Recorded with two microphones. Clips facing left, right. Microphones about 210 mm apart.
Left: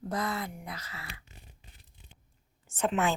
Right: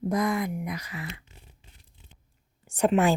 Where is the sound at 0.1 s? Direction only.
15° right (ahead or behind).